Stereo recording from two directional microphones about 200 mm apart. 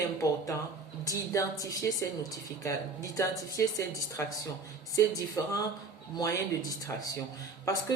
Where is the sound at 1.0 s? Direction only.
15° left (ahead or behind).